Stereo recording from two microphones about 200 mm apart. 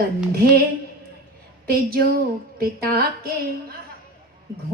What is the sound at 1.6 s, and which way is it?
A woman's voice, 50° right (ahead or behind).